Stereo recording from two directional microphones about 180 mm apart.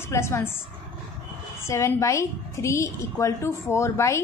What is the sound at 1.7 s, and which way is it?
A woman's voice, 15° left (ahead or behind).